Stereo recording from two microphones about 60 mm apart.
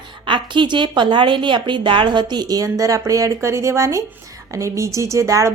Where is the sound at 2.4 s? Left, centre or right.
Right.